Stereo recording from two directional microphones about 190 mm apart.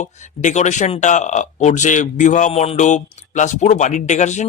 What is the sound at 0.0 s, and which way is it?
Speech, 40° left (ahead or behind).